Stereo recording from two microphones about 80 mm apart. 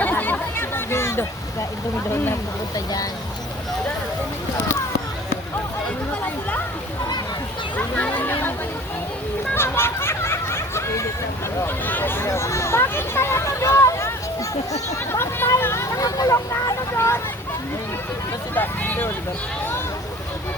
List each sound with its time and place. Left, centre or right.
0.0 s chatter: left
2.0 s speech: left
2.7 s speech: left
7.8 s a sound: centre
9.6 s a sound: left
11.6 s hubbub: left
15.1 s speech: left
16.0 s speech: left
18.5 s speech: left